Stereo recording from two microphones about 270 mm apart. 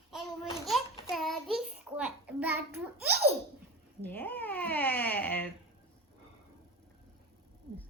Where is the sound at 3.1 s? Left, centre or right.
Right.